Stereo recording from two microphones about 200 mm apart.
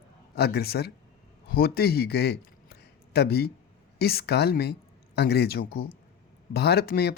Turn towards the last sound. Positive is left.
turn(degrees=50)  # may be behind; listen again after turning